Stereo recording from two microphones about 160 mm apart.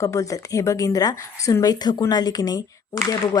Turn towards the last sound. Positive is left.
turn(degrees=20)  # may be behind; listen again after turning